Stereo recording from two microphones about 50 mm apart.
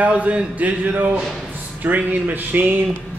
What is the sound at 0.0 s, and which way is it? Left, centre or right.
A man's voice, right.